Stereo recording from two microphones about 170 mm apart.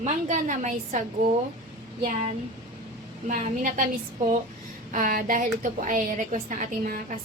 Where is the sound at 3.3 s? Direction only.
50° right (ahead or behind).